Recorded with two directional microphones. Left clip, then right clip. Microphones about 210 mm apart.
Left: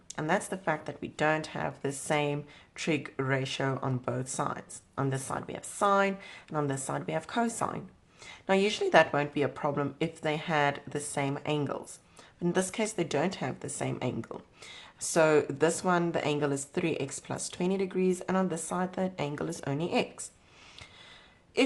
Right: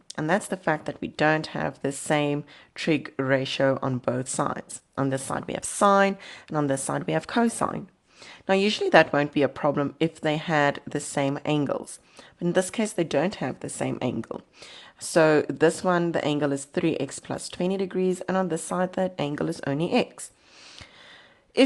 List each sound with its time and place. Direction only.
0.1 s speech: 35° right (ahead or behind)